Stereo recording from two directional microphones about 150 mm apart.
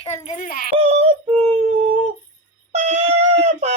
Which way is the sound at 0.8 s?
45° right (ahead or behind).